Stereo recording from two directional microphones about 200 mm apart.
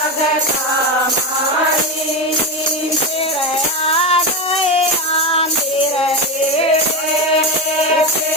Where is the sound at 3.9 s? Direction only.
30° left (ahead or behind).